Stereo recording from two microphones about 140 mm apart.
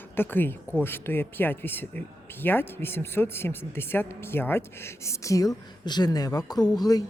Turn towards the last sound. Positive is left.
turn(degrees=25)  # may be behind; listen again after turning